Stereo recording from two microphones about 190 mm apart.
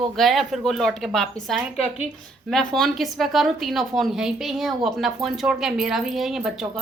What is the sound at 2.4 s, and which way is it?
A woman's voice, centre (ahead or behind).